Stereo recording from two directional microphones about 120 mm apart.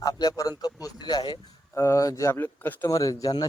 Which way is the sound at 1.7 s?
25° left (ahead or behind).